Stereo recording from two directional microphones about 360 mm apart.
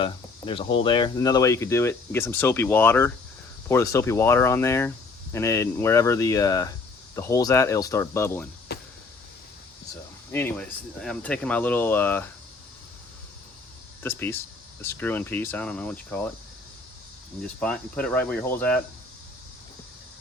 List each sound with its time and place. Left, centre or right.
0.0 s speech: centre
8.7 s vehicle: left
10.3 s speech: centre
14.0 s speech: centre
17.6 s speech: centre